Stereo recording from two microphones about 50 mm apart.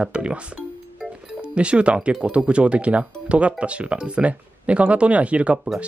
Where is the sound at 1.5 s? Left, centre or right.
Right.